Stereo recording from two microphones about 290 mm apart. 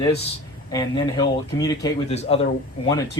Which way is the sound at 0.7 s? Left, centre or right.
Centre.